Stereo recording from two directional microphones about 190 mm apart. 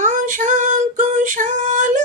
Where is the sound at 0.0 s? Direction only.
40° right (ahead or behind).